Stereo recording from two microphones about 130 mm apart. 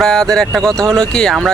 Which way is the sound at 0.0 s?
5° left (ahead or behind).